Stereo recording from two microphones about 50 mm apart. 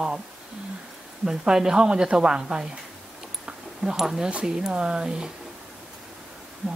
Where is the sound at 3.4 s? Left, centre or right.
Centre.